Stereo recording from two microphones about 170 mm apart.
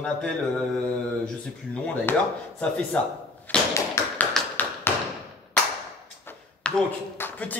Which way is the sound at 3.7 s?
20° left (ahead or behind).